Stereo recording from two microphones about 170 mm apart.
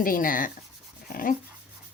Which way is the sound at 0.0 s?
55° left (ahead or behind).